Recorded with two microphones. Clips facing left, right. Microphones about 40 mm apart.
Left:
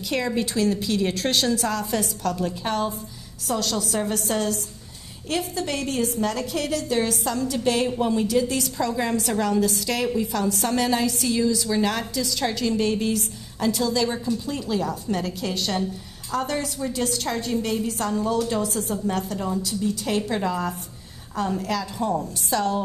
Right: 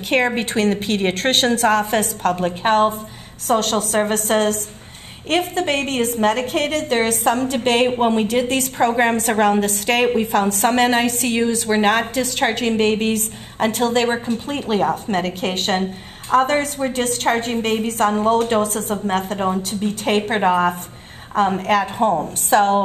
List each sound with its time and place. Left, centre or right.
0.1 s a woman's voice: right